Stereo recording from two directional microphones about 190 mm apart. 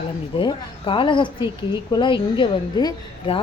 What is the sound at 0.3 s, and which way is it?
A woman's voice, 25° left (ahead or behind).